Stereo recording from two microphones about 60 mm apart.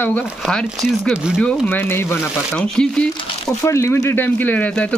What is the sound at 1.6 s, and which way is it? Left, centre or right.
Speech, left.